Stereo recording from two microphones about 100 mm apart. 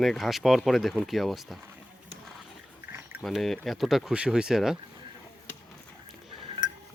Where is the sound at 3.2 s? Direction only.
Centre (ahead or behind).